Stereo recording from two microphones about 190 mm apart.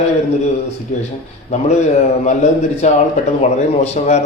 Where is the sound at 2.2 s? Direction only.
35° left (ahead or behind).